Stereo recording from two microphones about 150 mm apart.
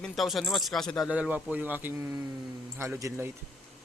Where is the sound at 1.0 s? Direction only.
10° right (ahead or behind).